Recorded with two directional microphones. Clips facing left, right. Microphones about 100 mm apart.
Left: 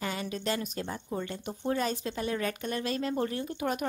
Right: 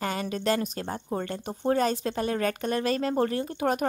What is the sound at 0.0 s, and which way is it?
Speech, 50° right (ahead or behind).